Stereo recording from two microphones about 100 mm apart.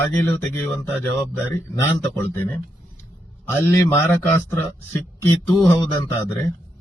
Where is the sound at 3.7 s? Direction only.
25° left (ahead or behind).